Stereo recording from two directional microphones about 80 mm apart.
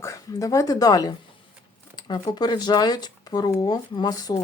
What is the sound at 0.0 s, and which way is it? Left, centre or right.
Speech, left.